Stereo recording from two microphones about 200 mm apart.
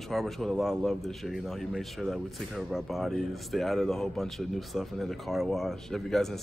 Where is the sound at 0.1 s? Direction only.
Centre (ahead or behind).